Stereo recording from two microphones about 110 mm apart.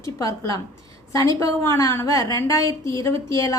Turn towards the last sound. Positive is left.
turn(degrees=30)  # may be behind; listen again after turning